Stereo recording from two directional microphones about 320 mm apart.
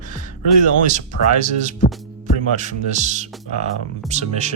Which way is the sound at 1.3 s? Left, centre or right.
Right.